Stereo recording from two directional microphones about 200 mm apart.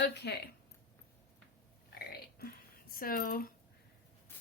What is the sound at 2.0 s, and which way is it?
Music, 50° left (ahead or behind).